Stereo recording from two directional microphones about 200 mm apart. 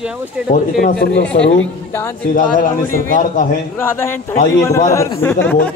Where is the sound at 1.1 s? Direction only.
65° left (ahead or behind).